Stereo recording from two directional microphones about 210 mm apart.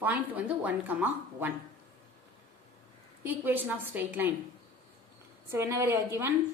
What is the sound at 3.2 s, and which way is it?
A woman's voice, 10° right (ahead or behind).